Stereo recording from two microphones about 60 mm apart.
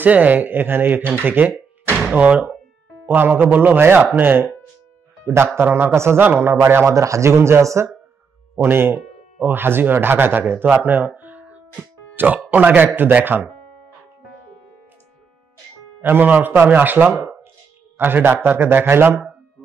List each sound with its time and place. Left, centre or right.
0.0 s speech: right
3.1 s speech: right
6.9 s speech: right
8.5 s speech: right
11.1 s music: right
12.4 s a man's voice: right
16.0 s speech: right